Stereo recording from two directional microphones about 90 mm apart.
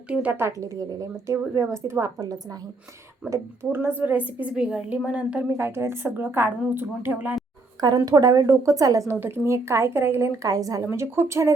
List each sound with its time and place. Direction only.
0.1 s a woman's voice: 15° right (ahead or behind); by 2.2 s 35° right (ahead or behind)
3.2 s a woman's voice: 30° right (ahead or behind); by 5.5 s 10° right (ahead or behind)
5.5 s a woman's voice: 30° right (ahead or behind)
7.8 s a woman's voice: 50° right (ahead or behind)
9.2 s a woman's voice: 25° right (ahead or behind)
10.9 s speech: 25° right (ahead or behind)